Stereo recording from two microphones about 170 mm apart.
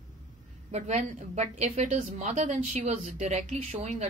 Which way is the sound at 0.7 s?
40° right (ahead or behind).